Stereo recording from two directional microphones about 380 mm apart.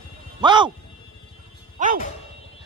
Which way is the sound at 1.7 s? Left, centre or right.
Right.